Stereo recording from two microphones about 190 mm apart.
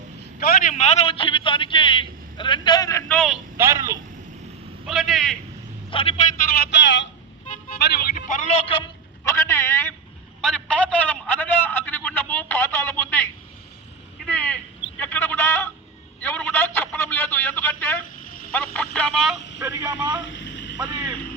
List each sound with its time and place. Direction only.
0.3 s a man's voice: 50° left (ahead or behind); by 3.0 s 20° left (ahead or behind)
3.1 s a man's voice: centre (ahead or behind)
3.6 s a man's voice: 15° right (ahead or behind)
4.9 s a man's voice: centre (ahead or behind)
5.9 s a man's voice: 30° left (ahead or behind)
6.5 s a sound: 60° left (ahead or behind)
7.4 s vehicle: 45° left (ahead or behind)
7.8 s speech: 60° left (ahead or behind); by 8.8 s 30° left (ahead or behind)
9.2 s a man's voice: 15° left (ahead or behind)
19.6 s a man's voice: 15° right (ahead or behind)
20.2 s vehicle: 70° left (ahead or behind)